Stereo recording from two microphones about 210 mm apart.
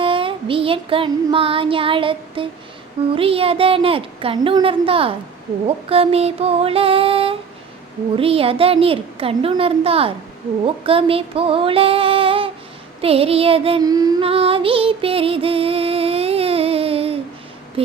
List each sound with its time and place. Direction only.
0.0 s child singing: 25° right (ahead or behind)
3.2 s a child's voice: 25° right (ahead or behind)
10.8 s a sound: 25° right (ahead or behind)
13.0 s child singing: 25° right (ahead or behind)
17.8 s speech: 25° right (ahead or behind)